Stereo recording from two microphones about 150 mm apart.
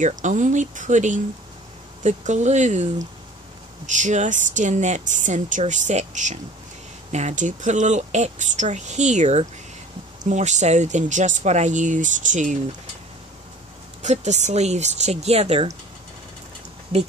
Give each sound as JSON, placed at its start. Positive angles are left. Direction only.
{"t": 0.0, "sound": "speech", "side_deg": -55}
{"t": 14.0, "sound": "speech", "side_deg": -50}